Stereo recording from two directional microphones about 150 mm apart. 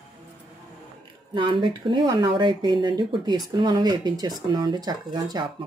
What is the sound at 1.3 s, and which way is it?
Speech, 30° right (ahead or behind).